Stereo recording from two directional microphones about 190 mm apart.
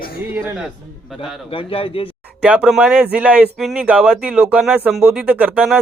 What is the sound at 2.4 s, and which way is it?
A man's voice, 5° right (ahead or behind).